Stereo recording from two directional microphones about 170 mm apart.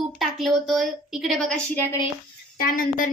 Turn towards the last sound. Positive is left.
turn(degrees=55)  # may be behind; listen again after turning